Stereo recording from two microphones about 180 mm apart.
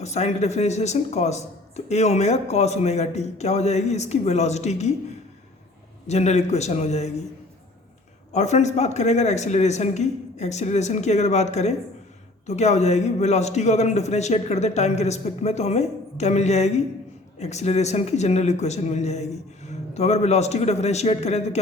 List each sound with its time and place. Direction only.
0.0 s speech: 40° left (ahead or behind)
6.1 s speech: 40° left (ahead or behind)
8.3 s speech: 40° left (ahead or behind)